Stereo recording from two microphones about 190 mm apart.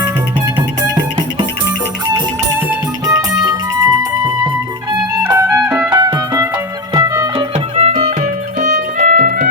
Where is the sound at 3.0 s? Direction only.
15° right (ahead or behind).